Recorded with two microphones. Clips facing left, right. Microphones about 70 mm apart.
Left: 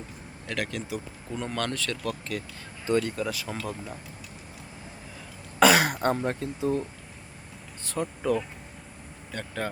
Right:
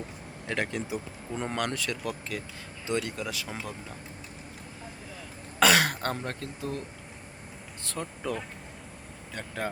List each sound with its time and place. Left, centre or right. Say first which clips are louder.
0.4 s speech: right 1 dB; right
2.8 s speech: left 5 dB; centre
5.5 s speech: left 3 dB; centre
7.9 s speech: left 6 dB; centre